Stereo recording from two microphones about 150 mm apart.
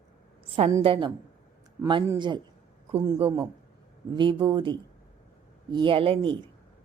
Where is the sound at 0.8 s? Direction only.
35° right (ahead or behind).